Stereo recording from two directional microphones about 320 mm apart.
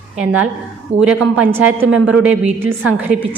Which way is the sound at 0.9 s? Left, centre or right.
Centre.